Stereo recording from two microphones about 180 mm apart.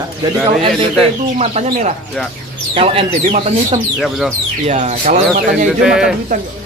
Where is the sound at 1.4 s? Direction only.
35° right (ahead or behind).